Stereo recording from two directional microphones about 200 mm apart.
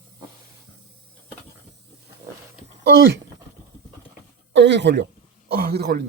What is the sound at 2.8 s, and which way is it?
Speech, 55° right (ahead or behind).